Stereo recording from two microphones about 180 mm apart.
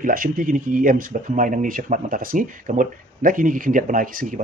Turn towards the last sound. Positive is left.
turn(degrees=-50)  # may be behind; listen again after turning